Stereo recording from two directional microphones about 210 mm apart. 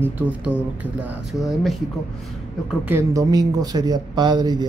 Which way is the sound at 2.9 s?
15° right (ahead or behind).